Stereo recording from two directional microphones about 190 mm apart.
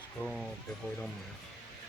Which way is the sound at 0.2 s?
Centre (ahead or behind).